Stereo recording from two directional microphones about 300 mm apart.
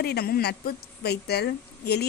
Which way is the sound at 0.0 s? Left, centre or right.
Left.